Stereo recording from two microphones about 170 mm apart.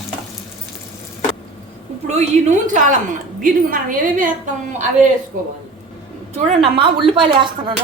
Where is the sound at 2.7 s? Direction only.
50° right (ahead or behind).